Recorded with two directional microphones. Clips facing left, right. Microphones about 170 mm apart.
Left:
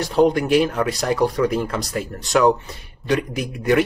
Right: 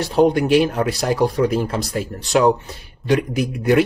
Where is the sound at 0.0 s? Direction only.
30° right (ahead or behind).